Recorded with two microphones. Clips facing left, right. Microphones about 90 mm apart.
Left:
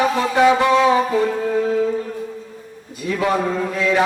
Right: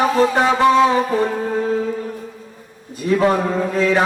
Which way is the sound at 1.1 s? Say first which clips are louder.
Even; 35° right (ahead or behind).